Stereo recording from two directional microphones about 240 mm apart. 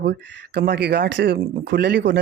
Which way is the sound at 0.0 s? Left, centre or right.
Right.